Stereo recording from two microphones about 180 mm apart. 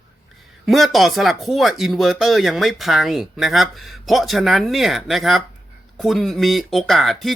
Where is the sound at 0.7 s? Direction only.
Centre (ahead or behind).